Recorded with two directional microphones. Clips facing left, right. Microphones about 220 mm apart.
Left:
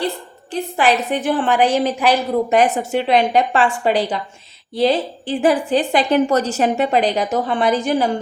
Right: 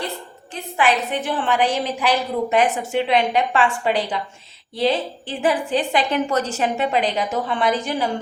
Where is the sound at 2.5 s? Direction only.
40° left (ahead or behind).